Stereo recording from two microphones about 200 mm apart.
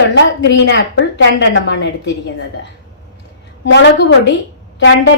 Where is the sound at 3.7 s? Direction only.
60° left (ahead or behind).